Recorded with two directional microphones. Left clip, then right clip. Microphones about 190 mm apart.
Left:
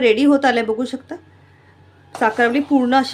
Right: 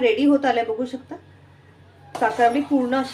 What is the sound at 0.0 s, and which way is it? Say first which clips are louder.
A woman's voice: left 4 dB; 55° left (ahead or behind).